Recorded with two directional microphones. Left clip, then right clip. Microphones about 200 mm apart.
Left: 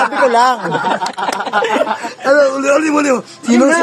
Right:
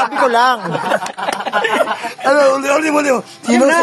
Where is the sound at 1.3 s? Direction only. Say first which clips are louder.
Even; 40° left (ahead or behind).